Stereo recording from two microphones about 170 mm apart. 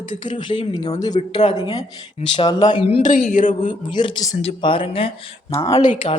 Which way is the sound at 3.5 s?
30° left (ahead or behind).